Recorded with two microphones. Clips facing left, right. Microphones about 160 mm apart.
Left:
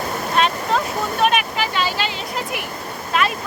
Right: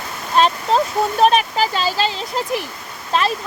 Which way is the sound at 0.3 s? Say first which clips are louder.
Right 4 dB; 35° right (ahead or behind).